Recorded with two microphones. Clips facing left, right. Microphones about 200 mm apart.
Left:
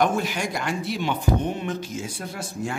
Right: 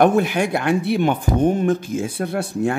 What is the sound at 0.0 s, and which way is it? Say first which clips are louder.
Speech: right 7 dB; 60° right (ahead or behind).